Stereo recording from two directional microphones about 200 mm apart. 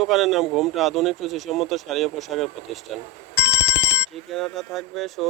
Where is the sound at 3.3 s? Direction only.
60° left (ahead or behind).